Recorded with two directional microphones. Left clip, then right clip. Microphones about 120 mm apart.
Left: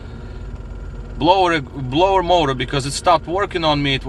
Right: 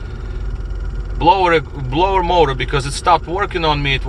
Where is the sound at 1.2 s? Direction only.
45° left (ahead or behind).